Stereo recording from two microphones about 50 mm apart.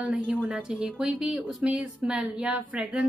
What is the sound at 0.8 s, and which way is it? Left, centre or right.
A woman's voice, right.